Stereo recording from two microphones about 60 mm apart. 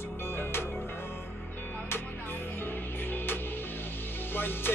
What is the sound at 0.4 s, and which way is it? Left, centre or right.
Music, left.